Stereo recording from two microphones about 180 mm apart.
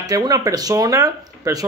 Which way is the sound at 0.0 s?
20° right (ahead or behind).